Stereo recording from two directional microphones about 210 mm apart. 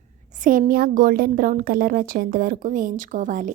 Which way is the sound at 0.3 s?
40° right (ahead or behind).